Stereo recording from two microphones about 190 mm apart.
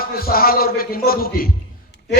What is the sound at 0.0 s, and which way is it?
A man's voice, 50° left (ahead or behind).